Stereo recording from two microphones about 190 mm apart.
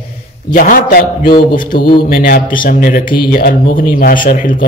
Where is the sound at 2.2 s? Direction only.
50° left (ahead or behind).